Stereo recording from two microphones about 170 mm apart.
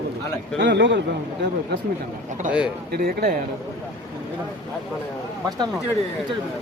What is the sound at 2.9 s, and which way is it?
Speech, 65° right (ahead or behind).